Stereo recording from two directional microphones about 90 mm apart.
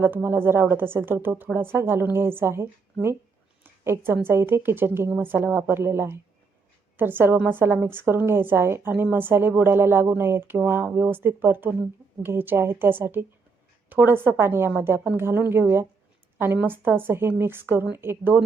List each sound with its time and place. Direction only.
0.0 s a woman's voice: 25° right (ahead or behind)